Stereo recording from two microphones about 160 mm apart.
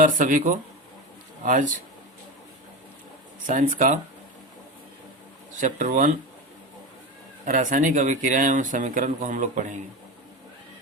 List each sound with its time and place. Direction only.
0.0 s speech: 55° right (ahead or behind)
3.4 s speech: 55° right (ahead or behind)
5.5 s speech: 50° right (ahead or behind)
7.4 s speech: 55° right (ahead or behind)